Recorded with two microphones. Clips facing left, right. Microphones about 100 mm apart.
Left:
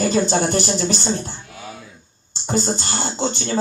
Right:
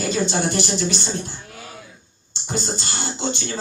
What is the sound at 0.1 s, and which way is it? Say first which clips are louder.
A man's voice: left 4 dB; 40° left (ahead or behind).